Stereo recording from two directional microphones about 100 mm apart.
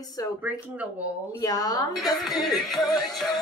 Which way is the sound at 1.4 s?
40° left (ahead or behind).